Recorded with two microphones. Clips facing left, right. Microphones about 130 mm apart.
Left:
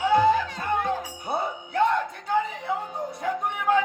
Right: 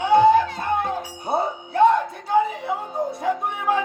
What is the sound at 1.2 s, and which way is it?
Music, 30° right (ahead or behind).